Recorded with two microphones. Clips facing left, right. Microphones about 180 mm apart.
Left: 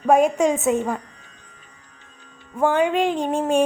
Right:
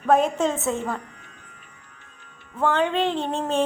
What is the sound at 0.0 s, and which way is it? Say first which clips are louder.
Speech: left 3 dB; 15° left (ahead or behind).